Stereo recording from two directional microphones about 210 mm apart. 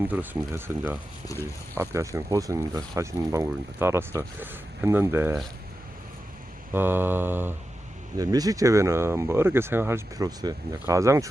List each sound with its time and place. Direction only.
0.0 s speech: 10° right (ahead or behind)
1.3 s speech: 15° left (ahead or behind)
1.7 s speech: 15° right (ahead or behind)
6.7 s speech: 10° right (ahead or behind)